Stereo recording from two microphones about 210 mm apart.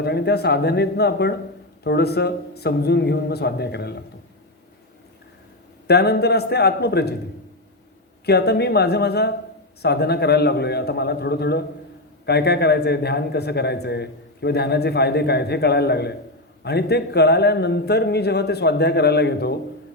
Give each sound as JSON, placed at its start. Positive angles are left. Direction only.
{"t": 0.0, "sound": "a man's voice", "side_deg": 50}
{"t": 5.9, "sound": "a man's voice", "side_deg": 50}
{"t": 8.2, "sound": "a man's voice", "side_deg": 50}